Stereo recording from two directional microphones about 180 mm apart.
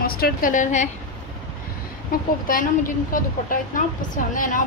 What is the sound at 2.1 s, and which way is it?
Speech, 50° left (ahead or behind).